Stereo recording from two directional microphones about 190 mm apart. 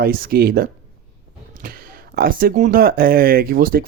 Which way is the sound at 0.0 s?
50° right (ahead or behind).